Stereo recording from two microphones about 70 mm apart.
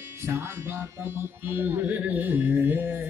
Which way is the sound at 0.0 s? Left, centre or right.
Right.